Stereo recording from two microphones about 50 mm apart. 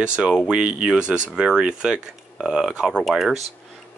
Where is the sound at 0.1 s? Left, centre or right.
Centre.